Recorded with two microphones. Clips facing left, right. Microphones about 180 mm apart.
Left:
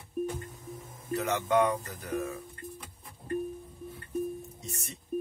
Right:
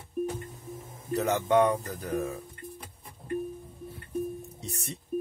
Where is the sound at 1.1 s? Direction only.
35° right (ahead or behind).